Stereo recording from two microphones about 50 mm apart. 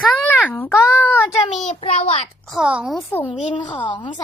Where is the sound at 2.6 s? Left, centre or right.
Right.